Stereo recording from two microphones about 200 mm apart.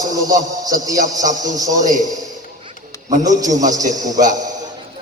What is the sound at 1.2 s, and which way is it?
Speech, 40° right (ahead or behind).